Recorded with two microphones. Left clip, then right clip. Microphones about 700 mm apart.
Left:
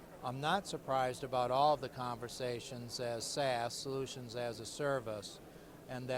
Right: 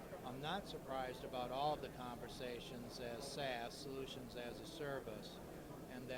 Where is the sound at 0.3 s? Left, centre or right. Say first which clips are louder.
Left 11 dB; left.